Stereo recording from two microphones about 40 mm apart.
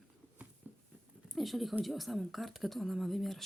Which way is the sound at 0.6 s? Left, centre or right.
Right.